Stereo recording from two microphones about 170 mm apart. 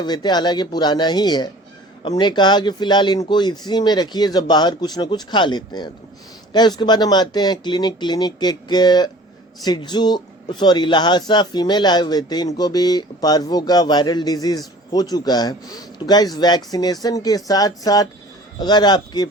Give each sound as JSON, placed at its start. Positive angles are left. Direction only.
{"t": 0.0, "sound": "a man's voice", "side_deg": 25}